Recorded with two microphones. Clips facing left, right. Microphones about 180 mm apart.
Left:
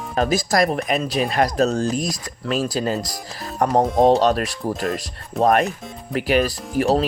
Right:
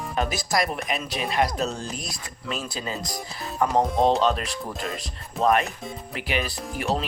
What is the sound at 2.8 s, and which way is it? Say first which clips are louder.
Speech: left 10 dB; 55° left (ahead or behind).